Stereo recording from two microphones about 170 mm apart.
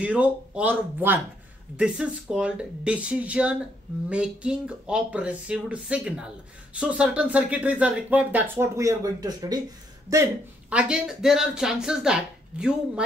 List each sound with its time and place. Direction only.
0.0 s speech: 10° right (ahead or behind)
10.7 s speech: 5° right (ahead or behind)